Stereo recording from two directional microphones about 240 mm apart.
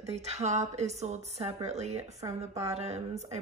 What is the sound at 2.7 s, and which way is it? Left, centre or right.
Speech, right.